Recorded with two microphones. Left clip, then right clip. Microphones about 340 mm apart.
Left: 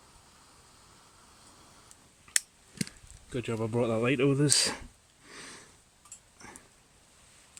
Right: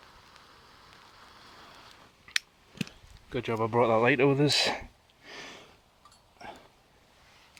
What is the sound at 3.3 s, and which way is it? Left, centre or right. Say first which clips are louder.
Speech: right 4 dB; centre.